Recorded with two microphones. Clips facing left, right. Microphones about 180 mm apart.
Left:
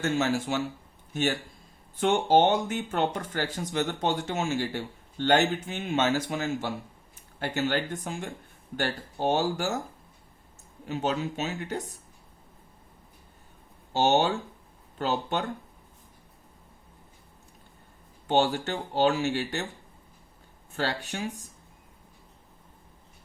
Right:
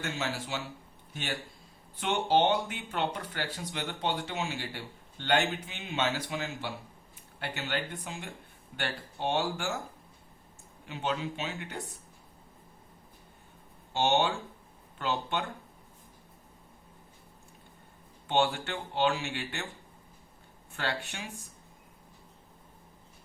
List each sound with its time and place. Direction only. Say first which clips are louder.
0.0 s speech: left 9 dB; 45° left (ahead or behind)
10.8 s speech: left 5 dB; 40° left (ahead or behind)
13.9 s speech: left 4 dB; 40° left (ahead or behind)
18.3 s speech: left 4 dB; 40° left (ahead or behind)
20.7 s speech: left 5 dB; 40° left (ahead or behind)